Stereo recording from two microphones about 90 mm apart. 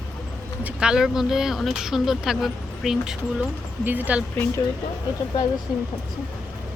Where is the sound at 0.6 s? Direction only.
10° right (ahead or behind).